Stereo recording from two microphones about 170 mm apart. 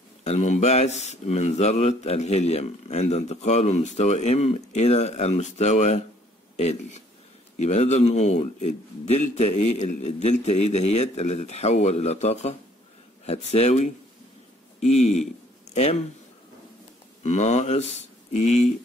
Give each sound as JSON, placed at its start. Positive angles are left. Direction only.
{"t": 0.2, "sound": "speech", "side_deg": 40}
{"t": 17.2, "sound": "speech", "side_deg": 40}